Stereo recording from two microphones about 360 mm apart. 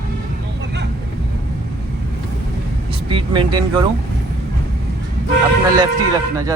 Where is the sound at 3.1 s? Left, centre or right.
Centre.